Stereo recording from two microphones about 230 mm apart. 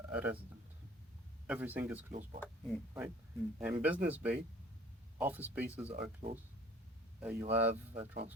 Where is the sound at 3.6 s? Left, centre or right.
Centre.